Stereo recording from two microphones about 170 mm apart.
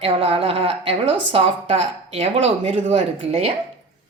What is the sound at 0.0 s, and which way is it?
A woman's voice, 35° right (ahead or behind).